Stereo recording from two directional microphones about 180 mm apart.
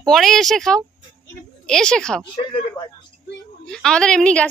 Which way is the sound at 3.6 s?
5° left (ahead or behind).